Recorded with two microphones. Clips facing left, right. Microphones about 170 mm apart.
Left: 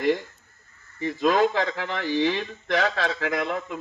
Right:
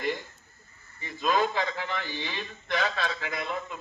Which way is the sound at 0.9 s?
90° left.